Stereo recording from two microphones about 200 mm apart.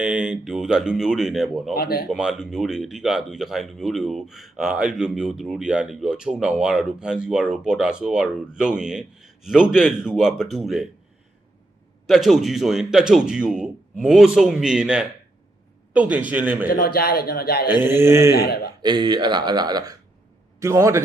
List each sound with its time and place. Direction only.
0.0 s speech: 5° right (ahead or behind)
1.7 s a man's voice: 50° left (ahead or behind)
2.0 s speech: 5° right (ahead or behind)
12.0 s a man's voice: centre (ahead or behind)
16.7 s a man's voice: 45° left (ahead or behind)
17.7 s a man's voice: 10° right (ahead or behind)
18.3 s a man's voice: 50° left (ahead or behind)
18.8 s a man's voice: 20° right (ahead or behind)